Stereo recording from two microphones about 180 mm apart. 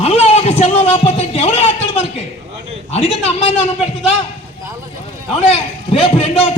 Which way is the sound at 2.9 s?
35° left (ahead or behind).